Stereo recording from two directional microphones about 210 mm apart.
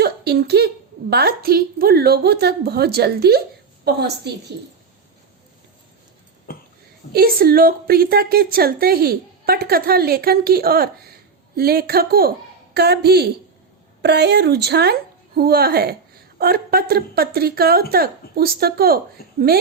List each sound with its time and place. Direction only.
0.0 s a sound: 50° right (ahead or behind)
1.1 s a woman's voice: 50° right (ahead or behind)
7.1 s a woman's voice: 45° right (ahead or behind)